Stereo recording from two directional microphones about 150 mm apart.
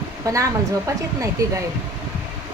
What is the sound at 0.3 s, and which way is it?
Speech, 20° right (ahead or behind).